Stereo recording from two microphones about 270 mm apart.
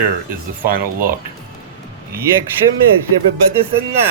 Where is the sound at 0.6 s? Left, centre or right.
Right.